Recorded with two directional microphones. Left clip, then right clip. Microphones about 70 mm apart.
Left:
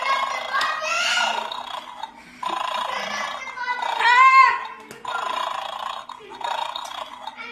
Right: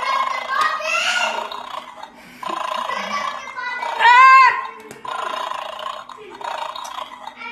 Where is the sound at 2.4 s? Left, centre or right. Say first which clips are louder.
Right 1 dB; left.